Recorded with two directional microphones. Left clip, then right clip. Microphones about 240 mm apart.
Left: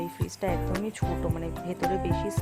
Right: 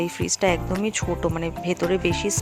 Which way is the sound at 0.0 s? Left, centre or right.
Centre.